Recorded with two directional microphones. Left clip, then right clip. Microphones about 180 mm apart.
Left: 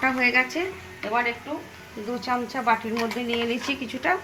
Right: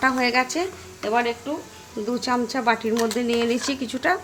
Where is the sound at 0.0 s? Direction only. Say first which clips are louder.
Right 1 dB; 50° right (ahead or behind).